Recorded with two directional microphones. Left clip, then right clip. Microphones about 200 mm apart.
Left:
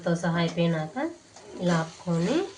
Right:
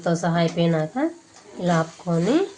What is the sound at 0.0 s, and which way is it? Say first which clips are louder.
Speech: right 5 dB; 60° right (ahead or behind).